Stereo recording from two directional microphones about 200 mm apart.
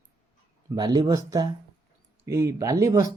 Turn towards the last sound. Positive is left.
turn(degrees=-15)  # may be behind; listen again after turning